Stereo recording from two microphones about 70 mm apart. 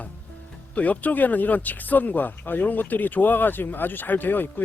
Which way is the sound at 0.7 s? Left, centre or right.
Left.